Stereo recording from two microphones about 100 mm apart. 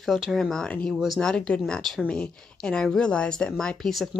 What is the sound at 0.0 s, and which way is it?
Speech, centre (ahead or behind).